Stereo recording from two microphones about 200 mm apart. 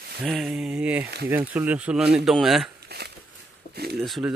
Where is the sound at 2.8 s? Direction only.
55° right (ahead or behind).